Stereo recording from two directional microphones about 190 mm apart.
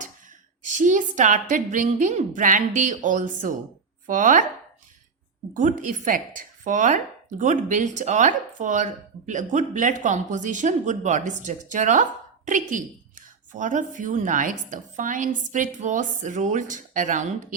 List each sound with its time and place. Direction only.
0.7 s a woman's voice: 40° right (ahead or behind)
5.5 s a woman's voice: 40° right (ahead or behind)